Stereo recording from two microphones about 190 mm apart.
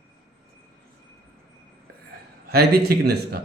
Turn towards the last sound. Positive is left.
turn(degrees=-55)  # may be behind; listen again after turning